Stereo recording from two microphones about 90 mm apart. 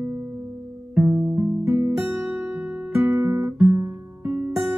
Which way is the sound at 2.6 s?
25° right (ahead or behind).